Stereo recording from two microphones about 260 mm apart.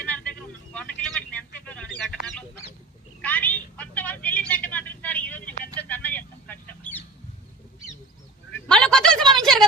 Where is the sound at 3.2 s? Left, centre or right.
Centre.